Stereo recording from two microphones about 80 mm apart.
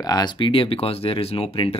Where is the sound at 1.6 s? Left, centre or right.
Left.